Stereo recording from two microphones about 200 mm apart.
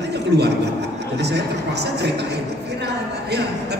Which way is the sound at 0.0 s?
55° right (ahead or behind).